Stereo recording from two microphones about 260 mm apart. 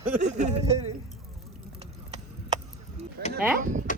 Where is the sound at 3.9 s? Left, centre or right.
Left.